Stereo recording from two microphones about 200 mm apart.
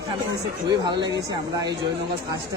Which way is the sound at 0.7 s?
20° right (ahead or behind).